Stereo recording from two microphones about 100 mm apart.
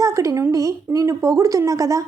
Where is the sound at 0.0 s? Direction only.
35° right (ahead or behind).